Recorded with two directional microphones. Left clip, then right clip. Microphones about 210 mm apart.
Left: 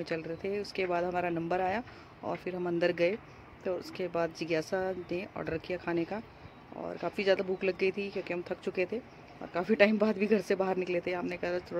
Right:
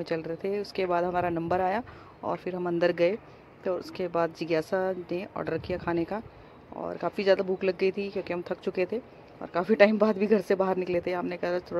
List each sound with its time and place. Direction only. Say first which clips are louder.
0.0 s speech: right 4 dB; 5° right (ahead or behind)